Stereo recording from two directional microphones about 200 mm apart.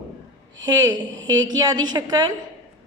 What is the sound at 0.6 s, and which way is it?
A woman's voice, 20° right (ahead or behind).